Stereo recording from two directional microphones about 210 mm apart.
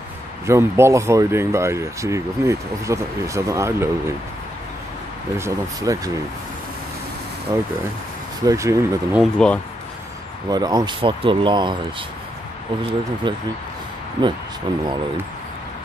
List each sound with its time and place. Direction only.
0.5 s speech: 10° right (ahead or behind)
5.4 s speech: 15° right (ahead or behind)
7.5 s speech: 15° right (ahead or behind)
9.2 s speech: 5° left (ahead or behind)
10.5 s speech: 20° right (ahead or behind)
13.2 s speech: 20° right (ahead or behind)